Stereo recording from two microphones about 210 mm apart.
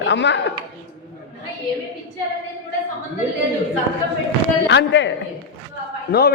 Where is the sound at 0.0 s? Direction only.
55° left (ahead or behind).